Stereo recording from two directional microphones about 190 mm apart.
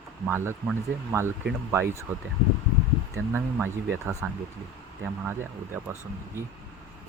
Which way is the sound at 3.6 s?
10° right (ahead or behind).